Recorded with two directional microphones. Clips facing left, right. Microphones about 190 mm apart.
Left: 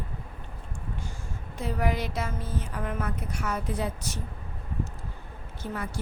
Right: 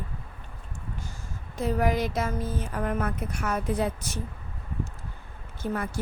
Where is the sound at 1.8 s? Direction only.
45° right (ahead or behind).